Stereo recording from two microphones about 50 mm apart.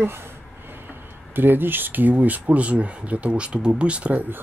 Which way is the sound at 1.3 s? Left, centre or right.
Right.